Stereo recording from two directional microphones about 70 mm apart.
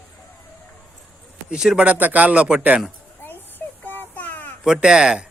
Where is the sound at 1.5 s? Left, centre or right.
Centre.